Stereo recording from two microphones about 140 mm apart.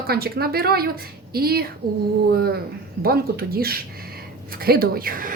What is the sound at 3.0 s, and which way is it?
A woman's voice, 90° right.